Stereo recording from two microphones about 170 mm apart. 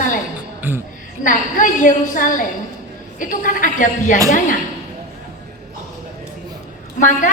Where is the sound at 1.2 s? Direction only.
50° left (ahead or behind).